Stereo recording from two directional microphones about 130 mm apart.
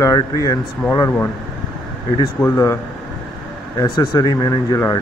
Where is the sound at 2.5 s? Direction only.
20° left (ahead or behind).